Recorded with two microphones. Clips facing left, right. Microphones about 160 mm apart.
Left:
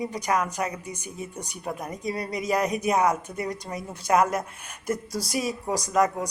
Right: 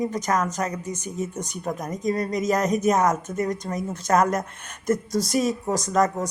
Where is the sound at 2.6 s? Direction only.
45° right (ahead or behind).